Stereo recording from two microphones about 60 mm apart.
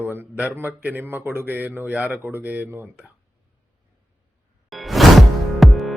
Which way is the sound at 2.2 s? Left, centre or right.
Right.